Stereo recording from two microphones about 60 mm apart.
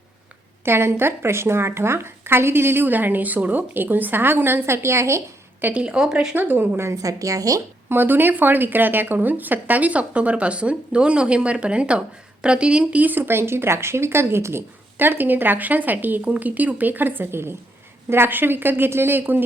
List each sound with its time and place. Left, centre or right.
0.6 s speech: right
5.7 s speech: centre
6.3 s speech: right
6.8 s speech: right
7.9 s speech: right